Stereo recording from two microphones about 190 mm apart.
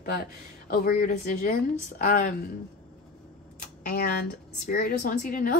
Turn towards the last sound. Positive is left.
turn(degrees=45)  # may be behind; listen again after turning